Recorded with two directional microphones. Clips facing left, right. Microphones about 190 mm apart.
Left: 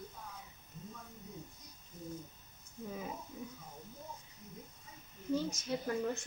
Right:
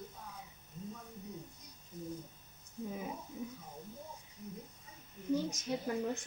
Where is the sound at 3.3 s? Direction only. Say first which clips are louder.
Right 3 dB; 20° right (ahead or behind).